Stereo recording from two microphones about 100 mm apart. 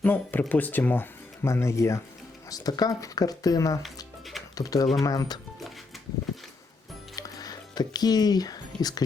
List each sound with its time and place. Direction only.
0.0 s speech: 15° left (ahead or behind); by 5.4 s 40° left (ahead or behind)
7.2 s music: 40° left (ahead or behind)